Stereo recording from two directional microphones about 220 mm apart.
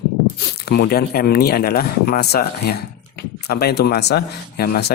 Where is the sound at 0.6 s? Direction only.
45° left (ahead or behind).